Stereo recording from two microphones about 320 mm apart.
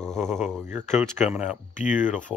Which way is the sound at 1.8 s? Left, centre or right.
Left.